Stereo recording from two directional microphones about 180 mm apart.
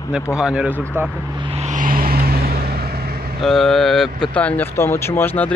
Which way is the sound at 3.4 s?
Centre (ahead or behind).